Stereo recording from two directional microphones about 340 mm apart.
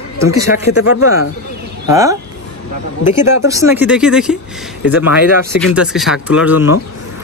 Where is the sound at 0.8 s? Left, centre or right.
Left.